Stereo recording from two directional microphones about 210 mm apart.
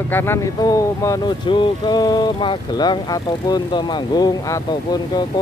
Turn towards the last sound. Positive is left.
turn(degrees=20)  # may be behind; listen again after turning